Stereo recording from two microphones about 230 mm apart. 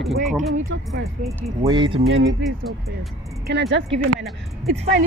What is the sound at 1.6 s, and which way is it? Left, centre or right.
Speech, right.